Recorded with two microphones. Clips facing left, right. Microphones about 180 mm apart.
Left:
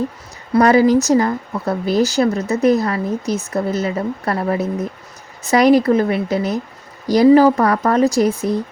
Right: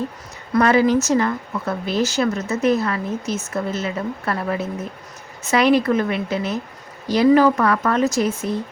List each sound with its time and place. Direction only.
0.5 s speech: 35° left (ahead or behind)